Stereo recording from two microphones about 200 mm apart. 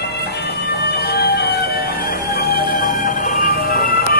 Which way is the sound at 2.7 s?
45° left (ahead or behind).